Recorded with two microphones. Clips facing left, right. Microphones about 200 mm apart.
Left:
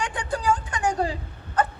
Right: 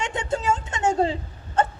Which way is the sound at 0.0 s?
25° right (ahead or behind).